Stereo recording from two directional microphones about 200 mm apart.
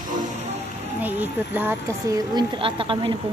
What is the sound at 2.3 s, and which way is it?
Speech, 25° right (ahead or behind).